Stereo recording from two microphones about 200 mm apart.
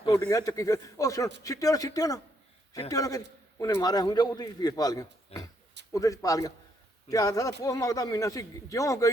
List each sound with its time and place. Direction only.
0.3 s a man's voice: 20° left (ahead or behind)
5.3 s a sound: 30° left (ahead or behind)
5.9 s speech: 15° left (ahead or behind)